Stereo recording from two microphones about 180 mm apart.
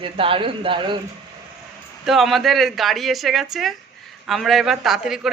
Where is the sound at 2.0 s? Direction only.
Centre (ahead or behind).